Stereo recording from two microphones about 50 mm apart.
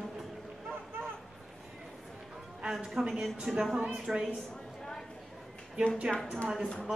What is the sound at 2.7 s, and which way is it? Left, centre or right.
Speech, centre.